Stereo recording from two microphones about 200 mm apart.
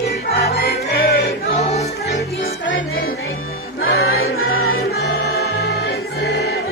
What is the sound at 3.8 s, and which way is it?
Music, 90° left.